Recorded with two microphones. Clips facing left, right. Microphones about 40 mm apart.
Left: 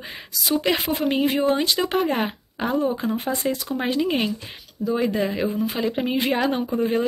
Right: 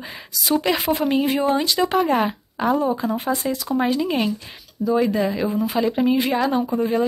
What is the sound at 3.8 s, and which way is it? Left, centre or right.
Speech, centre.